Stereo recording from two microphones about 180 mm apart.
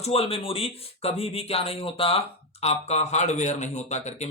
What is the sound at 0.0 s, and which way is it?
Speech, 35° left (ahead or behind).